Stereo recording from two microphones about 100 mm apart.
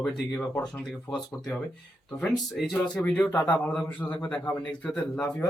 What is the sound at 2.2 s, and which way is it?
Speech, centre (ahead or behind).